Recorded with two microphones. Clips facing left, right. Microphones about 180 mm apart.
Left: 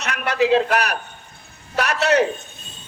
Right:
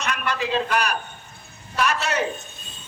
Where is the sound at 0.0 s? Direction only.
70° left (ahead or behind).